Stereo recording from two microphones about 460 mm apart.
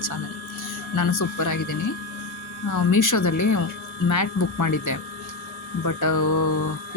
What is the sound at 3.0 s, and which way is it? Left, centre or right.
A woman's voice, left.